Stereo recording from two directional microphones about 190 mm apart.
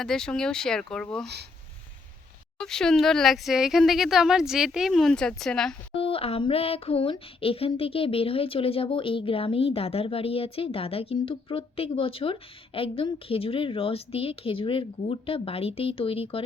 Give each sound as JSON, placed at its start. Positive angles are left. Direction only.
{"t": 0.0, "sound": "speech", "side_deg": 5}
{"t": 2.6, "sound": "speech", "side_deg": 5}
{"t": 5.9, "sound": "a sound", "side_deg": 30}